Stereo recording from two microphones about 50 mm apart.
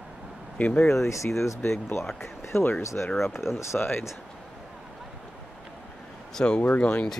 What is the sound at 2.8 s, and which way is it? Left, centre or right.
Speech, left.